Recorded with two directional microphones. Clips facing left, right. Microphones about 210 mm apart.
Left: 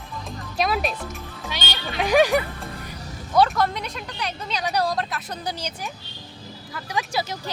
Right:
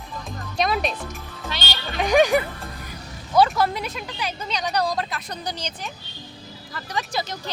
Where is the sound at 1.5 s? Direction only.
10° left (ahead or behind).